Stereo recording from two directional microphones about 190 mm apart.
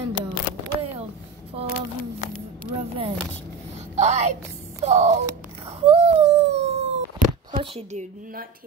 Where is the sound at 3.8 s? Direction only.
35° right (ahead or behind).